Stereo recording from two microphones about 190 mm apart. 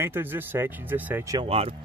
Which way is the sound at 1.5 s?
30° right (ahead or behind).